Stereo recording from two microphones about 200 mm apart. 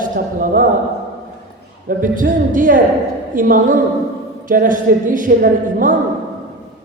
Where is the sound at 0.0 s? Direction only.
40° right (ahead or behind).